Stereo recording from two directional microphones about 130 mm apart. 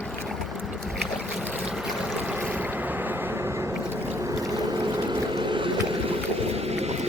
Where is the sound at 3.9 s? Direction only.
15° right (ahead or behind).